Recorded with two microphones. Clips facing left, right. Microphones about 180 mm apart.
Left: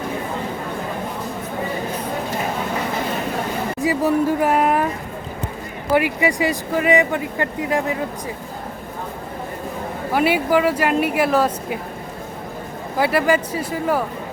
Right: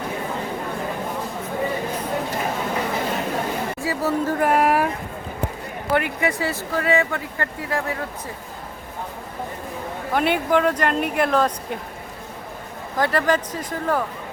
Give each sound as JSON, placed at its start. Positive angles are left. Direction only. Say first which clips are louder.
{"t": 3.8, "sound": "speech", "louder": "left 7 dB", "side_deg": 15}
{"t": 4.6, "sound": "a sound", "louder": "left 1 dB", "side_deg": -5}
{"t": 5.9, "sound": "speech", "louder": "left 4 dB", "side_deg": 5}
{"t": 10.1, "sound": "speech", "louder": "left 2 dB", "side_deg": 5}
{"t": 13.0, "sound": "speech", "louder": "left 3 dB", "side_deg": 10}